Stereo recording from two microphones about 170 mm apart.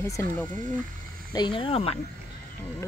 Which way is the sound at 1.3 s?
30° left (ahead or behind).